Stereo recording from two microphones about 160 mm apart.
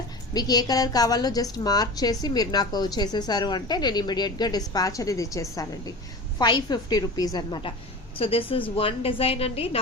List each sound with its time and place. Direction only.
0.3 s a woman's voice: 25° left (ahead or behind)